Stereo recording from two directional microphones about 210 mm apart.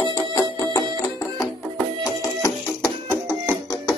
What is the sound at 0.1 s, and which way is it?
Music, 15° left (ahead or behind).